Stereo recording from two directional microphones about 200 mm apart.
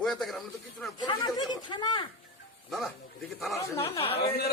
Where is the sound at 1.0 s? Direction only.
20° left (ahead or behind).